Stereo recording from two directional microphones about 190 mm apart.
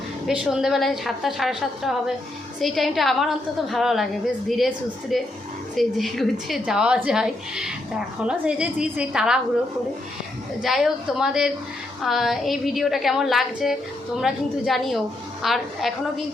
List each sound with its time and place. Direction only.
0.3 s a woman's voice: 5° right (ahead or behind)
10.6 s a woman's voice: centre (ahead or behind)